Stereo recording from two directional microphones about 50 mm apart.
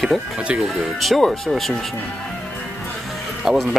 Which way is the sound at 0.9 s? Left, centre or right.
Centre.